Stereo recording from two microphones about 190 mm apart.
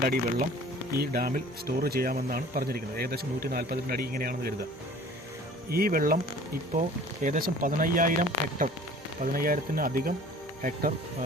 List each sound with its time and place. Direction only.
0.0 s speech: 50° right (ahead or behind)
5.7 s speech: 50° right (ahead or behind)